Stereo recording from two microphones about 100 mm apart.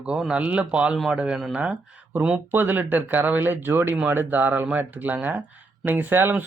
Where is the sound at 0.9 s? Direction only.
Centre (ahead or behind).